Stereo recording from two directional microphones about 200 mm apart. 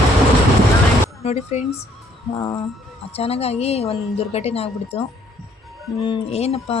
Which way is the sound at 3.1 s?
30° left (ahead or behind).